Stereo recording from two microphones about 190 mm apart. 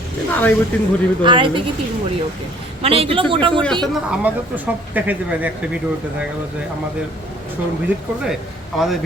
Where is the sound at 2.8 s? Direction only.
30° right (ahead or behind).